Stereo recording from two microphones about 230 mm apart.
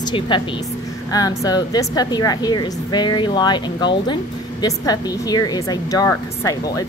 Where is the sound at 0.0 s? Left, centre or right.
Centre.